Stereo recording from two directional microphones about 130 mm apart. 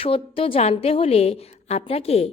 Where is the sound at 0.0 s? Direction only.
45° left (ahead or behind).